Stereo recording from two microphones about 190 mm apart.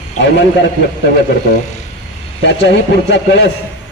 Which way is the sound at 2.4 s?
65° left (ahead or behind).